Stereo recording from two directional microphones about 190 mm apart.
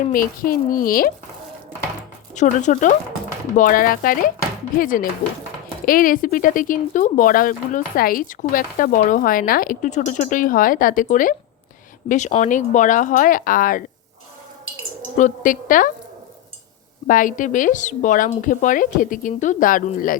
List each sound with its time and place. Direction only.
0.1 s speech: 45° left (ahead or behind)
2.3 s speech: 40° left (ahead or behind)
15.2 s speech: 45° left (ahead or behind)
17.1 s speech: 45° left (ahead or behind)